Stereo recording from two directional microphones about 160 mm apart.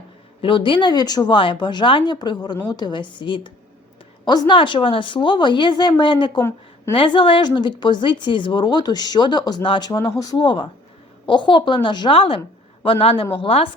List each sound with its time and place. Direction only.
0.4 s a man's voice: 30° left (ahead or behind)